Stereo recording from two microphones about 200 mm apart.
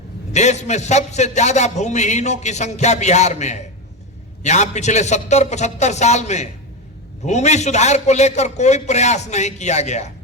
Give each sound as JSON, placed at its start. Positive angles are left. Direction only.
{"t": 0.3, "sound": "a man's voice", "side_deg": 35}